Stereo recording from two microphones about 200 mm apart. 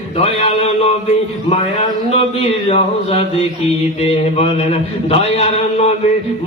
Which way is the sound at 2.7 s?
30° left (ahead or behind).